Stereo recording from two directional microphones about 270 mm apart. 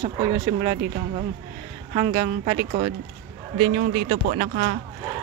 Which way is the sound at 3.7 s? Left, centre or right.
Right.